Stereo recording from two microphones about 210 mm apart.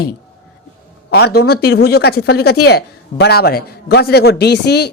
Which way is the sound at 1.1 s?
50° left (ahead or behind).